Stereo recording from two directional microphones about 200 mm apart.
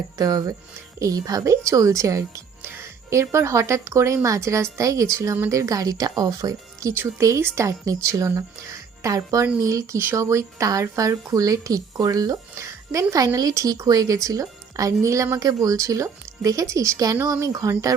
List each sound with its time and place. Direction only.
0.2 s speech: 20° right (ahead or behind)